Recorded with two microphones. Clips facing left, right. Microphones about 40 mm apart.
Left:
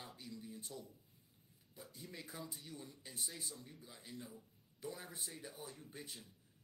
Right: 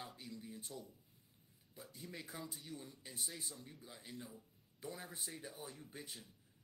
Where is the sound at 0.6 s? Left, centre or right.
Right.